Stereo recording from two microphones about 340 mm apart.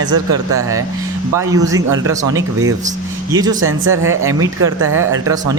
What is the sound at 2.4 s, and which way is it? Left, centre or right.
Speech, right.